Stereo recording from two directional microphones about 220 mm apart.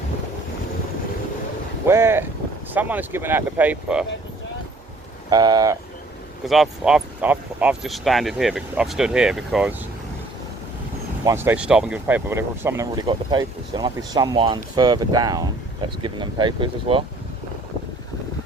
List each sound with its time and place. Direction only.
1.9 s speech: 10° right (ahead or behind)
5.3 s speech: 15° right (ahead or behind)
6.4 s speech: centre (ahead or behind)
11.3 s speech: 10° right (ahead or behind)